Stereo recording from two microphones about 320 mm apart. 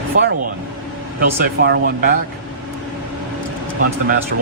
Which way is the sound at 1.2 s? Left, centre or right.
Right.